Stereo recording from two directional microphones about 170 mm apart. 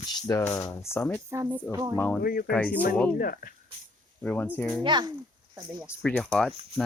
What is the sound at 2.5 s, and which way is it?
Speech, 10° left (ahead or behind).